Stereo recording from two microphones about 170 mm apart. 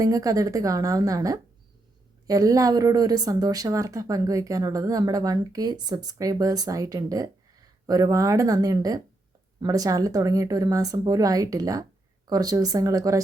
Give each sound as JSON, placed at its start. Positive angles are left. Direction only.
{"t": 0.0, "sound": "a woman's voice", "side_deg": -20}